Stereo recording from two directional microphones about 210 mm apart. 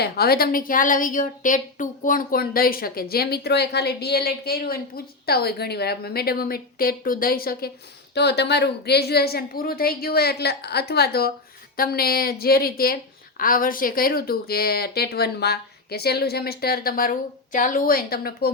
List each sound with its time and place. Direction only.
0.0 s speech: 45° left (ahead or behind)